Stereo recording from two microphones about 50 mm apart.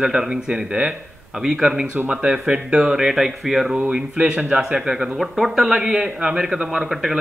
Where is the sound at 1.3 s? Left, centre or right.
Centre.